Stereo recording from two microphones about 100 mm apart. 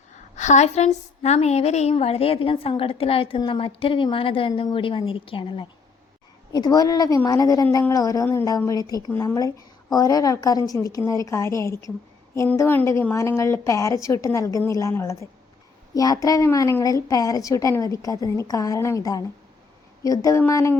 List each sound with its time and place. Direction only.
0.6 s a woman's voice: 90° left; by 5.6 s 60° left (ahead or behind)
6.5 s a woman's voice: 40° left (ahead or behind)